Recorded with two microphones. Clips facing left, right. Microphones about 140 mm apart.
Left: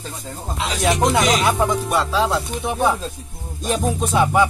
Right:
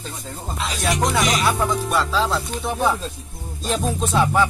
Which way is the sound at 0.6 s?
20° left (ahead or behind).